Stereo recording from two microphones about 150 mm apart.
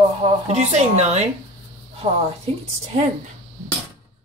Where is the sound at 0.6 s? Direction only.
50° right (ahead or behind).